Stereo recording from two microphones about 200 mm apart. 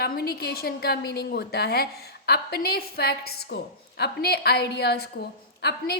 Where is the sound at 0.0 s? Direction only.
50° left (ahead or behind).